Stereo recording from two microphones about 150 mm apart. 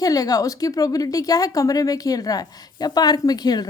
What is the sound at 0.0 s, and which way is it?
Speech, 25° left (ahead or behind).